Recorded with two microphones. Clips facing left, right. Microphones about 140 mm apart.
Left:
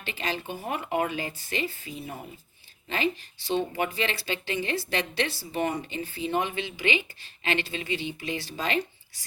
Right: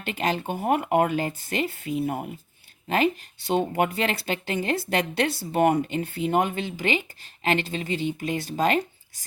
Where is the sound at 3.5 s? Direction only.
50° right (ahead or behind).